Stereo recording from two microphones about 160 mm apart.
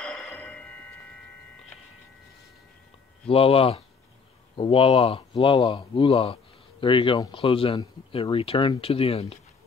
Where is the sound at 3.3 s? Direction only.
35° left (ahead or behind).